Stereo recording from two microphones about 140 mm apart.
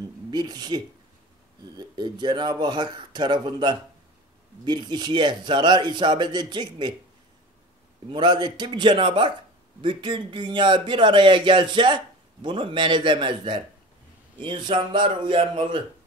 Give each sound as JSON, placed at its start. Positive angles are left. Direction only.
{"t": 0.3, "sound": "speech", "side_deg": -30}
{"t": 8.1, "sound": "speech", "side_deg": -35}